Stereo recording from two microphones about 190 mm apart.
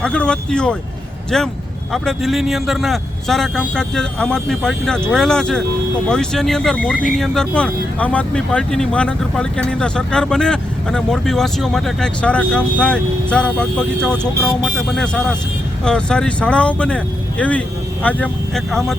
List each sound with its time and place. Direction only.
0.0 s speech: 5° left (ahead or behind)